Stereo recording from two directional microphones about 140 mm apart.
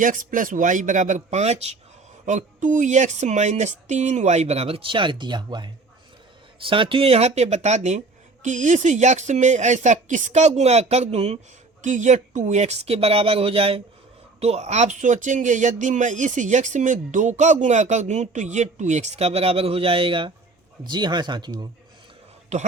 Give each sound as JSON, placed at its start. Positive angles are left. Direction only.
{"t": 0.0, "sound": "speech", "side_deg": -70}
{"t": 2.2, "sound": "speech", "side_deg": -65}